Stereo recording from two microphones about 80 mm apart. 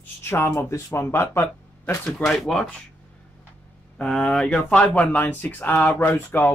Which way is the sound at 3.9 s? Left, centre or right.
Centre.